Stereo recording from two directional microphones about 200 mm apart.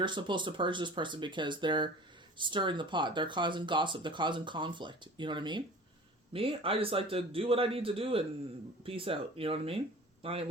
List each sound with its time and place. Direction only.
0.0 s speech: 25° right (ahead or behind)